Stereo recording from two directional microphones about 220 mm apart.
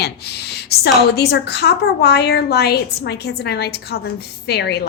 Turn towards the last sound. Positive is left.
turn(degrees=50)  # may be behind; listen again after turning